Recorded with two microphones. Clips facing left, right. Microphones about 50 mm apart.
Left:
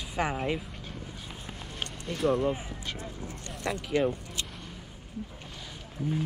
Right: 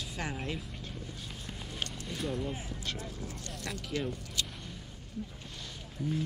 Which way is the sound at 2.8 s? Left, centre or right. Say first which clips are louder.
Left 1 dB; left.